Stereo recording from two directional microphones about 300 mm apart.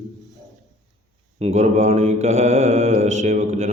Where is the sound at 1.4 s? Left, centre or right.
Right.